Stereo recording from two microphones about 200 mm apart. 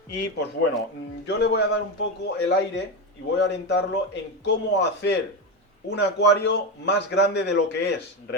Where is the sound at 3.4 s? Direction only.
60° left (ahead or behind).